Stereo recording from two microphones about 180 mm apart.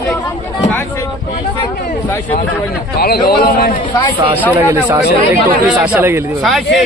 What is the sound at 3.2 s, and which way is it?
Speech, 60° left (ahead or behind).